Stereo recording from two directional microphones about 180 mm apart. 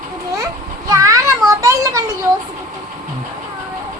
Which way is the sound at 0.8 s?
20° right (ahead or behind).